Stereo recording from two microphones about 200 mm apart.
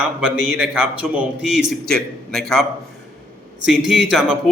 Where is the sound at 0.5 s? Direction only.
5° right (ahead or behind).